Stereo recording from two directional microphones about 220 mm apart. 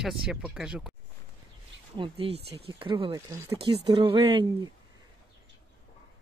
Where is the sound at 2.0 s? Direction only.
25° right (ahead or behind).